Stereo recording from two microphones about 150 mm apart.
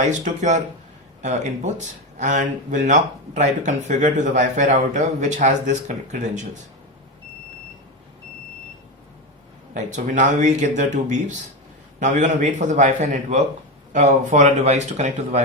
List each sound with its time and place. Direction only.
0.0 s speech: 55° right (ahead or behind)
9.7 s speech: 55° right (ahead or behind)